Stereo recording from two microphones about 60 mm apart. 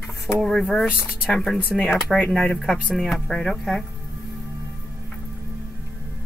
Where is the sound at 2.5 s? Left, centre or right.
Centre.